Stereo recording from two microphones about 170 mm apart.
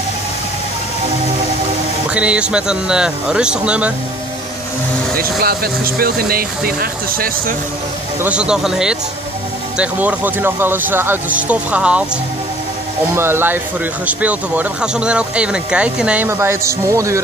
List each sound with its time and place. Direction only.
2.0 s speech: 5° right (ahead or behind)
5.1 s speech: 60° right (ahead or behind)
8.2 s speech: 5° right (ahead or behind)
13.1 s speech: 15° right (ahead or behind)